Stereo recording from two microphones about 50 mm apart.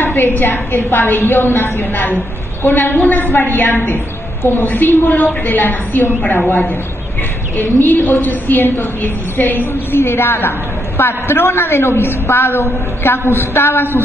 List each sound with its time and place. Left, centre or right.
0.0 s a woman's voice: left
7.5 s a woman's voice: left
9.9 s a woman's voice: left